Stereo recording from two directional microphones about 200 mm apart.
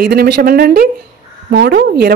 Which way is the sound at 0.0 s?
50° right (ahead or behind).